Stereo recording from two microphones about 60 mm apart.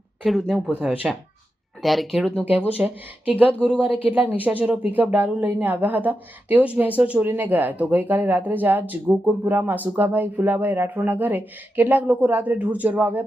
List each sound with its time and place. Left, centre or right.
0.3 s speech: centre
0.8 s speech: centre
1.8 s speech: centre
2.4 s a woman's voice: right
4.9 s a woman's voice: right